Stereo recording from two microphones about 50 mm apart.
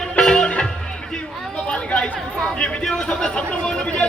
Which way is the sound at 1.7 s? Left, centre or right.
Left.